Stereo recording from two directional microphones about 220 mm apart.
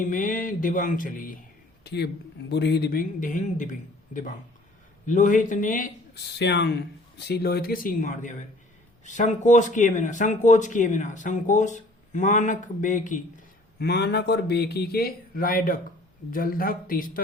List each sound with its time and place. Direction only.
0.0 s speech: 40° left (ahead or behind)
13.7 s speech: 45° left (ahead or behind)